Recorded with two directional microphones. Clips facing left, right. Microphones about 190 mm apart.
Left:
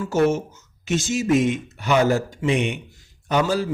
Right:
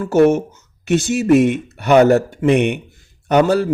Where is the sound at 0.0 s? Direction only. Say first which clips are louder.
Right 7 dB; 60° right (ahead or behind).